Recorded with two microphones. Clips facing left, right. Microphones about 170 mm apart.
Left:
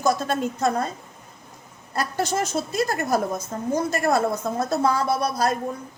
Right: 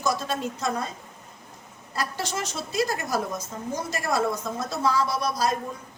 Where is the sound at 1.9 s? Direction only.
50° left (ahead or behind).